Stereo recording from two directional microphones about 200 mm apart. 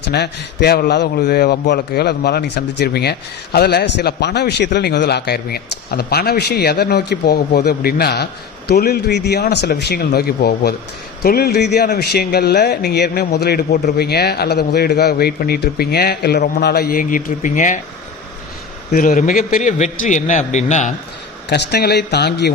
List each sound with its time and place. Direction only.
0.1 s a man's voice: 55° left (ahead or behind)
18.9 s a man's voice: 45° left (ahead or behind)
21.5 s speech: 55° left (ahead or behind)